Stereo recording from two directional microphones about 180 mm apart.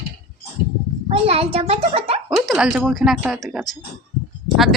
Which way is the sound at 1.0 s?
35° right (ahead or behind).